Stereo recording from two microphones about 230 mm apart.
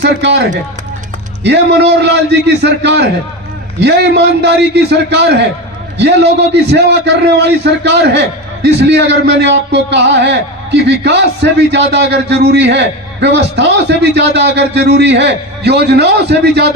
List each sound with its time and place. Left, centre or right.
0.0 s speech: right
1.5 s a man's voice: right